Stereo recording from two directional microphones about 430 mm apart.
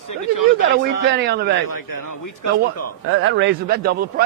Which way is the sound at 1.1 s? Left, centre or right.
Right.